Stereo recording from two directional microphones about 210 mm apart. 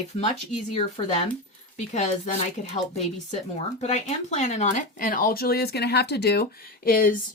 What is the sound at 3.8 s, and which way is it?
Speech, 30° left (ahead or behind).